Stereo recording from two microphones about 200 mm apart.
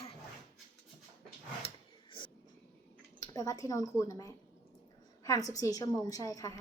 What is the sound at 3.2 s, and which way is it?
A woman's voice, 15° left (ahead or behind).